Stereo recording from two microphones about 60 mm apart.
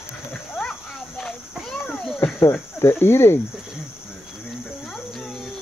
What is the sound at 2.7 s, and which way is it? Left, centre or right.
Speech, left.